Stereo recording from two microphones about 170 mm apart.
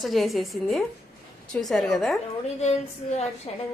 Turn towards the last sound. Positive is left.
turn(degrees=40)  # may be behind; listen again after turning